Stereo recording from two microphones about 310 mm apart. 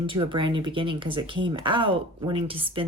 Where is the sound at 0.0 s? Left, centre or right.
Centre.